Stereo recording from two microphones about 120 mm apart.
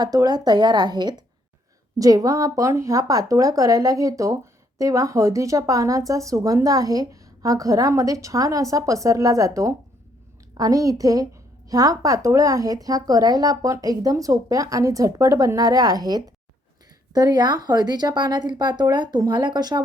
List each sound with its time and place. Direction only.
0.0 s speech: 35° right (ahead or behind)